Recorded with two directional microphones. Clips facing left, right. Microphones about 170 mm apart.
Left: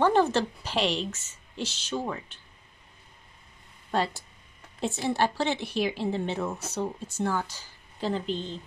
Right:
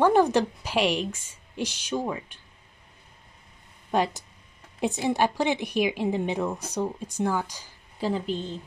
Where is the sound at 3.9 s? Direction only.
15° right (ahead or behind).